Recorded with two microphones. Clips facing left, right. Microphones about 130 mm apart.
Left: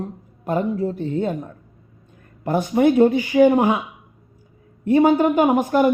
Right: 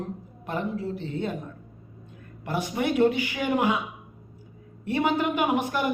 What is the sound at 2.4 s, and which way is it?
Speech, 45° left (ahead or behind).